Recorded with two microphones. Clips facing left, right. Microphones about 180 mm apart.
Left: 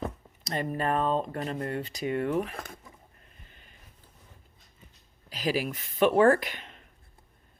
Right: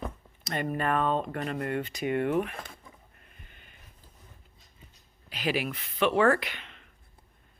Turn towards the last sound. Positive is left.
turn(degrees=40)  # may be behind; listen again after turning